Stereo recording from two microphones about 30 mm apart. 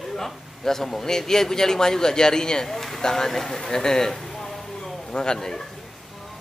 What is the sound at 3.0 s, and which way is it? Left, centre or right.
A man's voice, centre.